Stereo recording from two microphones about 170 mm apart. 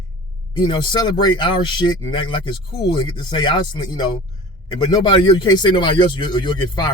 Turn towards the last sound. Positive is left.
turn(degrees=25)  # may be behind; listen again after turning